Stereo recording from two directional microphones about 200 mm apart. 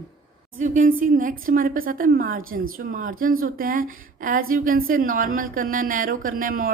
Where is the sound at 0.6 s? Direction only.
40° right (ahead or behind).